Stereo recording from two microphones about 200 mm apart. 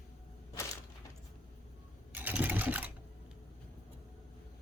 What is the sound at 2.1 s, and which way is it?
Sewing machine, 10° right (ahead or behind).